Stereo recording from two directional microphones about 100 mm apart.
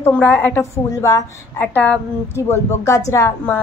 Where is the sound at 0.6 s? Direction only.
30° left (ahead or behind).